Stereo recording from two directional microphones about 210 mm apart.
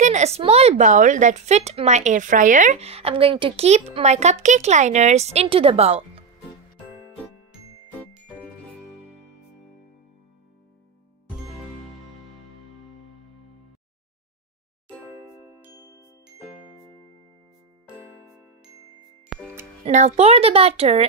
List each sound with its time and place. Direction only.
0.0 s speech: 35° right (ahead or behind)
8.4 s jingle: 5° left (ahead or behind)
18.0 s jingle: 10° right (ahead or behind)
19.3 s music: centre (ahead or behind)
19.8 s speech: 30° right (ahead or behind)